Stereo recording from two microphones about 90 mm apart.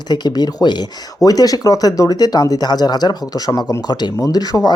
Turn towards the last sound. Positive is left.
turn(degrees=45)  # may be behind; listen again after turning